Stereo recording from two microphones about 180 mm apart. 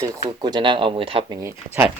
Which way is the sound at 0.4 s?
25° right (ahead or behind).